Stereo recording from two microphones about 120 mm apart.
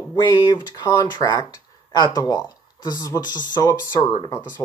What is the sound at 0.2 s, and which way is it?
Speech, 30° left (ahead or behind).